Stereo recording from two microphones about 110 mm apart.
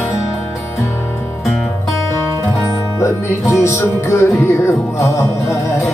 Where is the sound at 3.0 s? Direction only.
25° left (ahead or behind).